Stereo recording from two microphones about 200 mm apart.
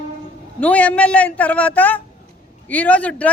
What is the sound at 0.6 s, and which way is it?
Speech, 5° left (ahead or behind).